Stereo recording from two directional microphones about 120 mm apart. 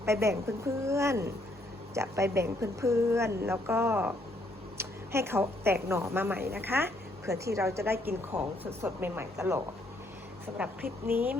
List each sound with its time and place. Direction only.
0.0 s a woman's voice: 20° right (ahead or behind)
10.6 s a woman's voice: 15° right (ahead or behind)